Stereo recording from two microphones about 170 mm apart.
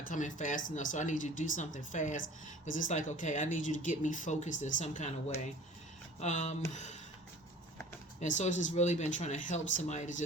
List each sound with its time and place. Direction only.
0.1 s speech: 45° left (ahead or behind)
6.1 s speech: 45° left (ahead or behind)
8.2 s speech: 45° left (ahead or behind)